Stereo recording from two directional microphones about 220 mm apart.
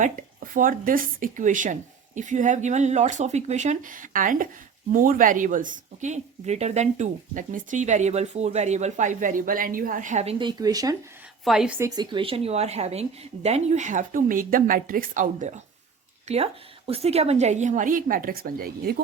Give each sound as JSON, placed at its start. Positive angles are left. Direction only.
{"t": 0.0, "sound": "speech", "side_deg": -40}
{"t": 11.4, "sound": "a woman's voice", "side_deg": -5}
{"t": 11.9, "sound": "speech", "side_deg": -25}